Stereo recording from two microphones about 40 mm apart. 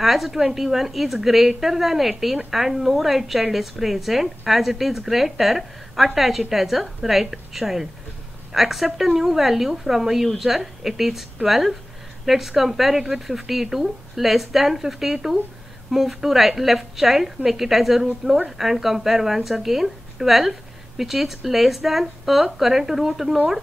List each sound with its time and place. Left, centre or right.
0.0 s a woman's voice: centre
18.2 s a woman's voice: right
18.6 s a woman's voice: centre